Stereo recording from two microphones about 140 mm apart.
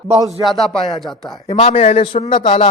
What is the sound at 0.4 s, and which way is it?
Speech, centre (ahead or behind).